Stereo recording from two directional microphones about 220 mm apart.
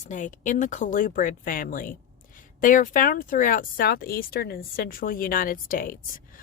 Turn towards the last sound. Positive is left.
turn(degrees=40)  # may be behind; listen again after turning